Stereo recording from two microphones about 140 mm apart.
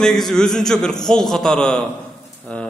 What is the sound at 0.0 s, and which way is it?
A man's voice, 5° left (ahead or behind).